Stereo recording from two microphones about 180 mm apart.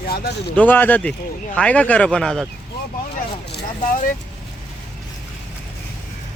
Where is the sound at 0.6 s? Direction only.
10° left (ahead or behind).